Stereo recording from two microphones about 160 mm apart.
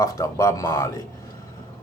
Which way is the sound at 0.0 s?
20° left (ahead or behind).